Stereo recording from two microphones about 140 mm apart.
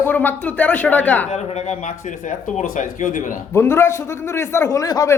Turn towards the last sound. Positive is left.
turn(degrees=25)  # may be behind; listen again after turning